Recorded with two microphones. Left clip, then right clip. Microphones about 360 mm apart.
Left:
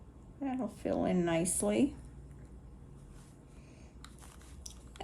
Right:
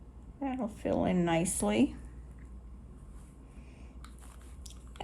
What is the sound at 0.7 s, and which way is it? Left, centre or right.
Speech, centre.